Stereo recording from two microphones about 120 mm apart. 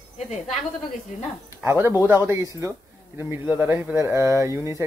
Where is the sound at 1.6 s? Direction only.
20° right (ahead or behind).